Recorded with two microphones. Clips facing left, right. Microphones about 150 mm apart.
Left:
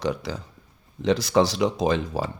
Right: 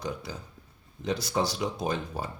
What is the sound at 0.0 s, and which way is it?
Speech, 90° left.